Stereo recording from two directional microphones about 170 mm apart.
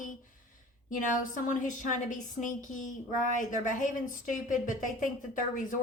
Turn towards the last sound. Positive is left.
turn(degrees=50)  # may be behind; listen again after turning